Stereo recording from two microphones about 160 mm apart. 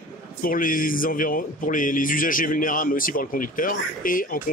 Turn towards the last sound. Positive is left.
turn(degrees=60)  # may be behind; listen again after turning